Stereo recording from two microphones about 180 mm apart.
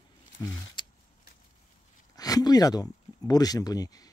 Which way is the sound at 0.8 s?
25° left (ahead or behind).